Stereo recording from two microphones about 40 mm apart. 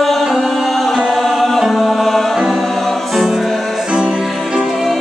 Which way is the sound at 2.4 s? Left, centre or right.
Centre.